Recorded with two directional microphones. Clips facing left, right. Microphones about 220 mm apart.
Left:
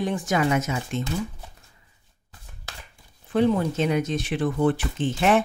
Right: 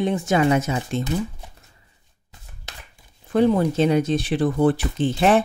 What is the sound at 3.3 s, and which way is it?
Speech, 35° right (ahead or behind).